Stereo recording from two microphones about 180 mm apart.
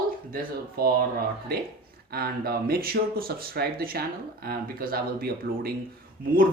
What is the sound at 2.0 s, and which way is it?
Speech, 60° right (ahead or behind).